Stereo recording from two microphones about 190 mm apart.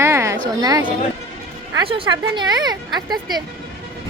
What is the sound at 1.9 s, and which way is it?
Speech, 25° right (ahead or behind).